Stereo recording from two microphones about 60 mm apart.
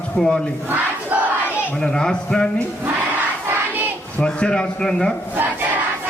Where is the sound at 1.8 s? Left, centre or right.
Centre.